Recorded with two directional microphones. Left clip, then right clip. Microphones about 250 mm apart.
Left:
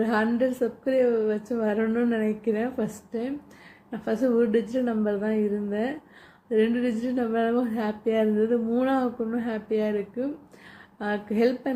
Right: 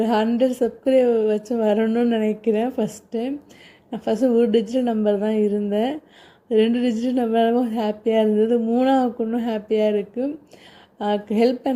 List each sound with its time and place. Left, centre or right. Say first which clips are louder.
0.0 s a woman's voice: right 5 dB; right